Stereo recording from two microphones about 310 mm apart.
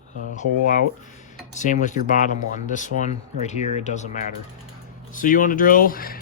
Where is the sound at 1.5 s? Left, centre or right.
Left.